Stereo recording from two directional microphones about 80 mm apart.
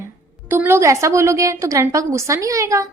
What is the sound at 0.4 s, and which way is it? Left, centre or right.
A woman's voice, right.